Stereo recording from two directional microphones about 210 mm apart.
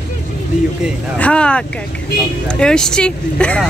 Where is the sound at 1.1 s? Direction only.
5° left (ahead or behind).